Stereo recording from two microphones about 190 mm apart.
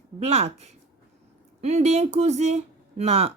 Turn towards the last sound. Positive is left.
turn(degrees=-35)  # may be behind; listen again after turning